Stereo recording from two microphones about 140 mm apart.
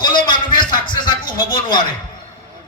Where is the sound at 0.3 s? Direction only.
35° left (ahead or behind).